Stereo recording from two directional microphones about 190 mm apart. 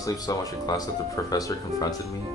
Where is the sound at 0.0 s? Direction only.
20° left (ahead or behind).